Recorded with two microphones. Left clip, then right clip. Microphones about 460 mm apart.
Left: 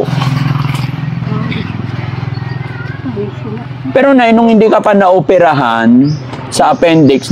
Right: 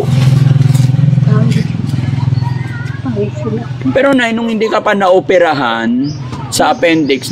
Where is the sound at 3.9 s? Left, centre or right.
Left.